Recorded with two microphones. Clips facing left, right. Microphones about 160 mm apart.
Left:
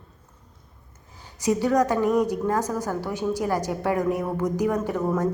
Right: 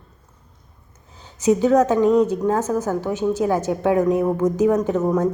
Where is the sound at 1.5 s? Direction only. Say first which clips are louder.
Right 5 dB; 20° right (ahead or behind).